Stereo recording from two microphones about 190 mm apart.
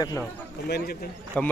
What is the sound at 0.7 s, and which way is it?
Speech, 55° left (ahead or behind).